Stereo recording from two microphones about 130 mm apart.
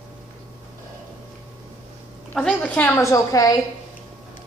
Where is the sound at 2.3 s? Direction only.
10° left (ahead or behind).